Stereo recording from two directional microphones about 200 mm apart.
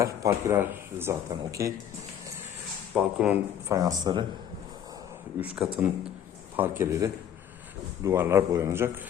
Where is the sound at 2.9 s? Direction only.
5° right (ahead or behind).